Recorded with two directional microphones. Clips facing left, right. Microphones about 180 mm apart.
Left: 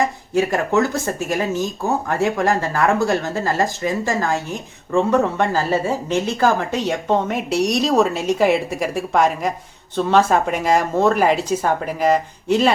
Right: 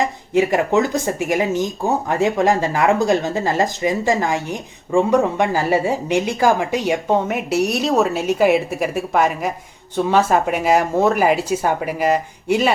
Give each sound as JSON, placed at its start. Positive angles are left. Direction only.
{"t": 0.0, "sound": "speech", "side_deg": -20}